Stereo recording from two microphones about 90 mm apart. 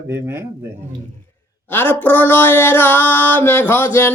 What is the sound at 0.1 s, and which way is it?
Speech, 25° right (ahead or behind).